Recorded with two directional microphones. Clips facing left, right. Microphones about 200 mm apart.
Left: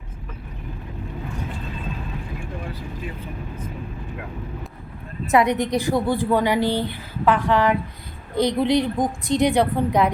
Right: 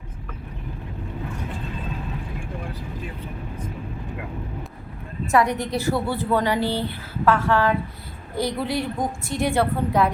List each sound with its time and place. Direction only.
5.3 s a woman's voice: 20° left (ahead or behind)